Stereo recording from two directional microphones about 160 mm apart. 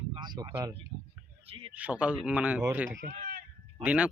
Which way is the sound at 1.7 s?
10° right (ahead or behind).